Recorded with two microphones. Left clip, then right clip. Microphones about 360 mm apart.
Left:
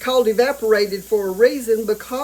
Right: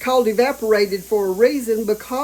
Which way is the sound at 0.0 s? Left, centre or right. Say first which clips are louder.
Even; centre.